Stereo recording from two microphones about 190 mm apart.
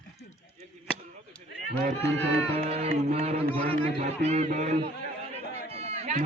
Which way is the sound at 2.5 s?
30° right (ahead or behind).